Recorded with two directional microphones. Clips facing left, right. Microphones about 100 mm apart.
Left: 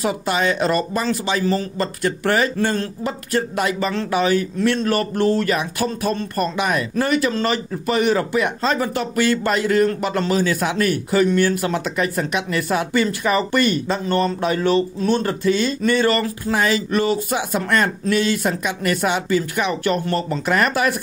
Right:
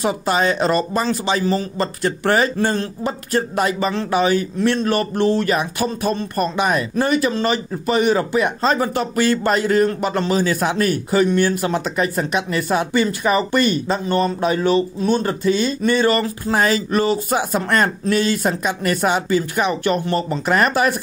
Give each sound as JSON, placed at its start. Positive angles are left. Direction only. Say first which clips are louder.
{"t": 0.0, "sound": "speech", "louder": "right 2 dB", "side_deg": -35}
{"t": 6.5, "sound": "speech", "louder": "right 2 dB", "side_deg": -30}
{"t": 16.5, "sound": "speech", "louder": "right 2 dB", "side_deg": -40}
{"t": 19.7, "sound": "speech", "louder": "right 1 dB", "side_deg": -20}